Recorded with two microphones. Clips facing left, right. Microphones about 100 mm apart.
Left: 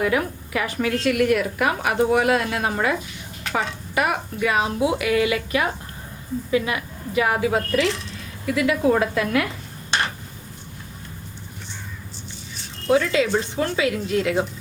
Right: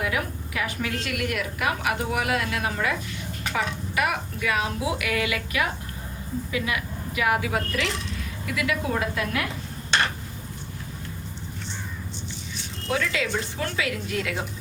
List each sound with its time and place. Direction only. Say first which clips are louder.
0.0 s a woman's voice: left 6 dB; 45° left (ahead or behind)
9.0 s a woman's voice: left 6 dB; 55° left (ahead or behind)
12.9 s a woman's voice: left 8 dB; 30° left (ahead or behind)